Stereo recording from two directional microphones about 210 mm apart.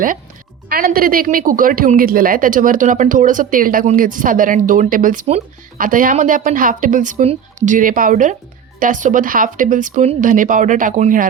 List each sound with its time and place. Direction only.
0.7 s a woman's voice: 45° right (ahead or behind)